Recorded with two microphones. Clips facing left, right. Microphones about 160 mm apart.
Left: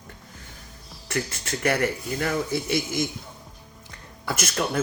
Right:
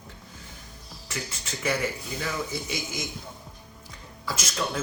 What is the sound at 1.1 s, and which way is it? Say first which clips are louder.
Speech: left 7 dB; 60° left (ahead or behind).